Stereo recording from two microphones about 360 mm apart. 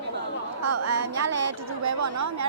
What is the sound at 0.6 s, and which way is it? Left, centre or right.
A woman's voice, right.